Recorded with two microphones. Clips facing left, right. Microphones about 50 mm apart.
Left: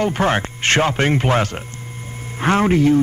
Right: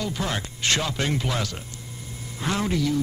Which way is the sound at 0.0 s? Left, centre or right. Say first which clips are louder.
Left 10 dB; left.